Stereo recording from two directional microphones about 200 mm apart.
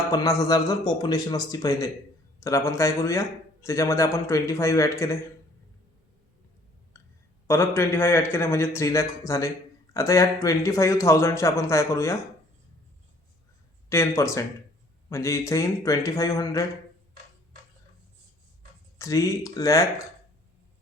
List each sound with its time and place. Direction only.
0.1 s a man's voice: 15° left (ahead or behind)
6.9 s a sound: 15° left (ahead or behind)
7.4 s a man's voice: 15° left (ahead or behind)
13.9 s a man's voice: 15° left (ahead or behind)
18.9 s a man's voice: 15° left (ahead or behind)